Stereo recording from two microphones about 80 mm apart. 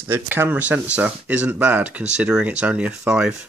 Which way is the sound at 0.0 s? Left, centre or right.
Right.